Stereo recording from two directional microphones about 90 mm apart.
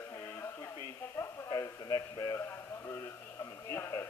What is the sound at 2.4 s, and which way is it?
Speech, 30° left (ahead or behind).